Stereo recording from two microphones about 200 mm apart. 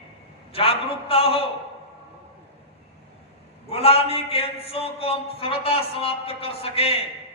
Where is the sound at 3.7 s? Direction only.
30° left (ahead or behind).